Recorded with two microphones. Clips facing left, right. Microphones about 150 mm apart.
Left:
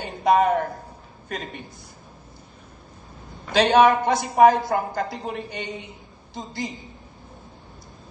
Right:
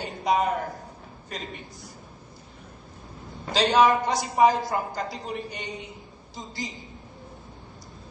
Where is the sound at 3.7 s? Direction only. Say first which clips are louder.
Left 3 dB; 55° left (ahead or behind).